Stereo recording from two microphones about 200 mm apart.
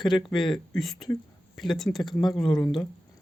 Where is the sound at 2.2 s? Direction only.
20° left (ahead or behind).